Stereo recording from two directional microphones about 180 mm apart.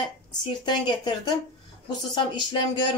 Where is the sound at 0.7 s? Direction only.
25° left (ahead or behind).